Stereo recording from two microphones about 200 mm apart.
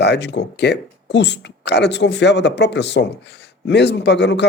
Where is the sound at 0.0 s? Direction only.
60° left (ahead or behind).